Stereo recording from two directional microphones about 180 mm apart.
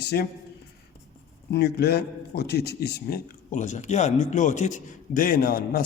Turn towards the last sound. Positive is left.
turn(degrees=55)  # may be behind; listen again after turning